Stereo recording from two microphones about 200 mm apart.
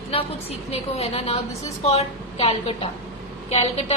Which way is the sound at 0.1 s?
30° left (ahead or behind).